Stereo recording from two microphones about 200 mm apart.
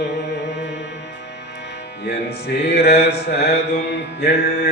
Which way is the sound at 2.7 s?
55° left (ahead or behind).